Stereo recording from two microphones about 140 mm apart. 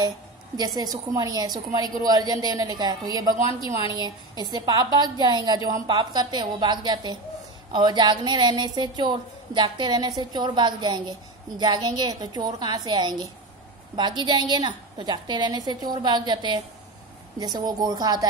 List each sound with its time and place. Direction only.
0.6 s a woman's voice: 30° right (ahead or behind)